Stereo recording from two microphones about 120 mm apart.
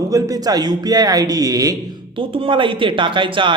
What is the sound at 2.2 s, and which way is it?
Speech, 45° right (ahead or behind).